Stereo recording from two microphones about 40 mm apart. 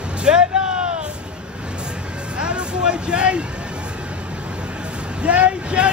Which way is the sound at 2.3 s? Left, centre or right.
Right.